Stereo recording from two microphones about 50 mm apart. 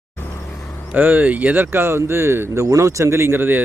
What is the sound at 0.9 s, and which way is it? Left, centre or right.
Speech, right.